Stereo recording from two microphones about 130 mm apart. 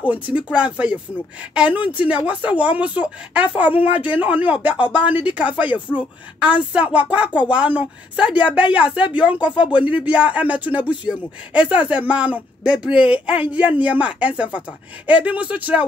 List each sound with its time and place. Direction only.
0.0 s speech: 10° right (ahead or behind)